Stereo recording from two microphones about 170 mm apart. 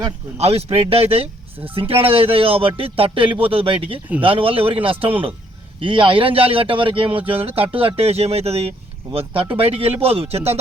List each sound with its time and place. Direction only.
0.3 s speech: 35° right (ahead or behind)